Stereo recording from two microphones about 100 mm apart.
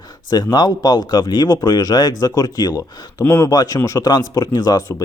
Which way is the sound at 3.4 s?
35° left (ahead or behind).